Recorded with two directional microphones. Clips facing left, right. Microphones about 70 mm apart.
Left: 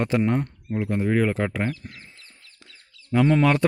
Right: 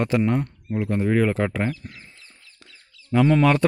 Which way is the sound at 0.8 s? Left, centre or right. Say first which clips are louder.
Right 1 dB; centre.